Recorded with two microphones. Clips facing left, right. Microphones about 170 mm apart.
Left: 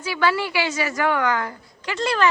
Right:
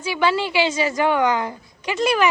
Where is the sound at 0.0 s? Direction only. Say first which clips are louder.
Right 2 dB; 20° right (ahead or behind).